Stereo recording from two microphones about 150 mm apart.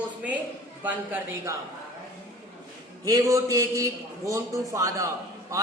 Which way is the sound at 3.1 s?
20° right (ahead or behind).